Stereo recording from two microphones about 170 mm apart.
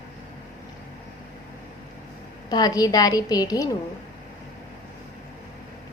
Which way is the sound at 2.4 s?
20° left (ahead or behind).